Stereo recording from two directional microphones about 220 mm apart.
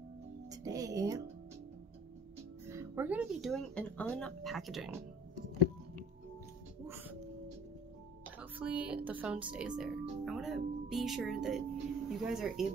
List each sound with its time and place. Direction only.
0.5 s speech: 15° right (ahead or behind)
2.7 s speech: 10° right (ahead or behind)
6.9 s music: 10° right (ahead or behind)
8.4 s speech: 5° right (ahead or behind)